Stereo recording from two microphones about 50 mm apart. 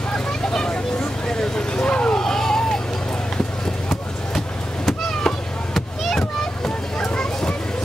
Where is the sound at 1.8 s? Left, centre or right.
Centre.